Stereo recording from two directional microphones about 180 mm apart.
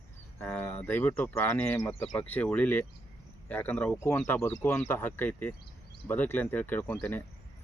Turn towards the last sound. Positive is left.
turn(degrees=10)  # may be behind; listen again after turning